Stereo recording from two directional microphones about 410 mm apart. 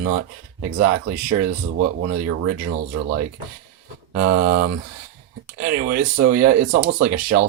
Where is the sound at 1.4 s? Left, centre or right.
Right.